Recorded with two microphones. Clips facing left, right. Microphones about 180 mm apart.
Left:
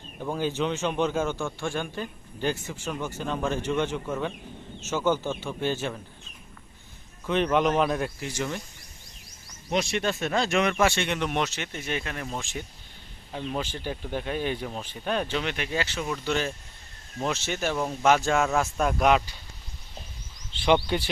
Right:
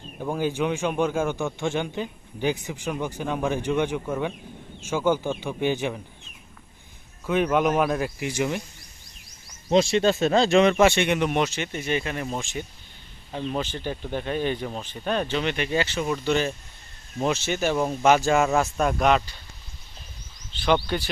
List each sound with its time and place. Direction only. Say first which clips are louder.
0.2 s speech: right 2 dB; 10° right (ahead or behind)
7.3 s speech: right 2 dB; 5° right (ahead or behind)
8.2 s speech: right 5 dB; 15° right (ahead or behind)
9.6 s speech: right 7 dB; 30° right (ahead or behind); by 19.3 s 5° left (ahead or behind)
20.7 s speech: even; 20° left (ahead or behind)